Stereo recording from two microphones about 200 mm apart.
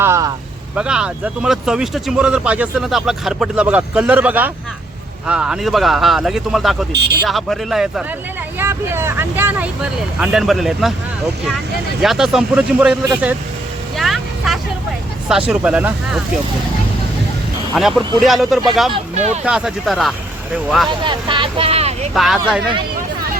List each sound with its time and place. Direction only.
0.0 s vehicle: 15° right (ahead or behind)
0.8 s speech: 5° right (ahead or behind)
6.9 s speech: 55° right (ahead or behind)
7.3 s speech: centre (ahead or behind)
12.0 s speech: centre (ahead or behind)
13.9 s vehicle: centre (ahead or behind)
15.3 s speech: 5° right (ahead or behind)
17.7 s speech: centre (ahead or behind)
19.1 s speech: 35° right (ahead or behind)
19.5 s speech: 5° right (ahead or behind)
21.0 s speech: 25° right (ahead or behind)
22.1 s speech: centre (ahead or behind)